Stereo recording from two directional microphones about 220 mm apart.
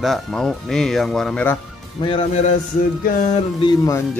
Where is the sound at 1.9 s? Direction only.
25° left (ahead or behind).